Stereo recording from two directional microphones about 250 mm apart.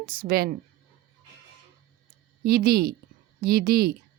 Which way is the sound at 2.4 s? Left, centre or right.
Right.